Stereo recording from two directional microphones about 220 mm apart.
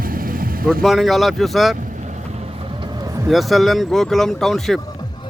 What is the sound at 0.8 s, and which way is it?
Speech, centre (ahead or behind).